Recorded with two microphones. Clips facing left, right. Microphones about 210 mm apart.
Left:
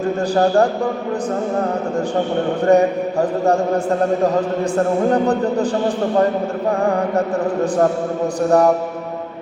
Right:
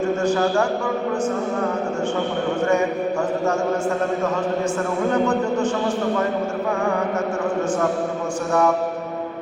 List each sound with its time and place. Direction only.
0.3 s speech: 35° left (ahead or behind)
2.6 s speech: 35° left (ahead or behind)
5.0 s speech: 35° left (ahead or behind)
8.4 s speech: 35° left (ahead or behind)